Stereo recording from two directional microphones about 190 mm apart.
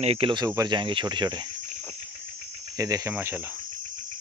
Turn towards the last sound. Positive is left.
turn(degrees=-10)  # may be behind; listen again after turning